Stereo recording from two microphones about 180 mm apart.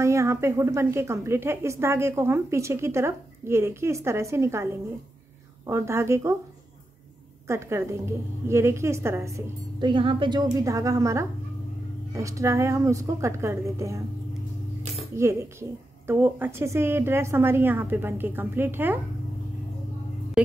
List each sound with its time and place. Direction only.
0.0 s a woman's voice: 15° right (ahead or behind)
7.4 s a woman's voice: 15° right (ahead or behind)
9.8 s a woman's voice: 25° right (ahead or behind)
16.1 s a woman's voice: 10° right (ahead or behind)
20.4 s a sound: 5° right (ahead or behind)